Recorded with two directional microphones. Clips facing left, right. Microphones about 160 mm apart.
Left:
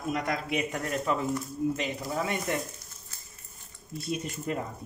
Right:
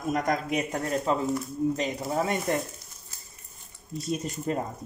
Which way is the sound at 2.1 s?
40° right (ahead or behind).